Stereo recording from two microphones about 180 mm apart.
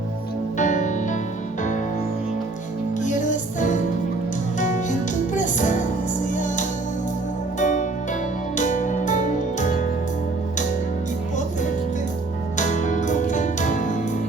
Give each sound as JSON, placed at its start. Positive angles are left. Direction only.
{"t": 0.6, "sound": "music", "side_deg": 45}
{"t": 3.0, "sound": "music", "side_deg": 45}
{"t": 12.5, "sound": "music", "side_deg": 45}